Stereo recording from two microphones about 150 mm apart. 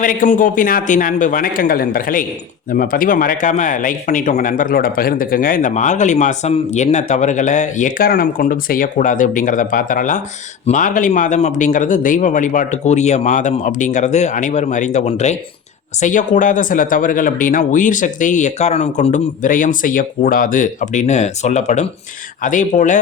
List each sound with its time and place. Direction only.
0.0 s speech: 65° left (ahead or behind)